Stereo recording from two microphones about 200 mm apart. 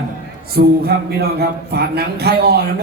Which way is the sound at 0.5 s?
50° right (ahead or behind).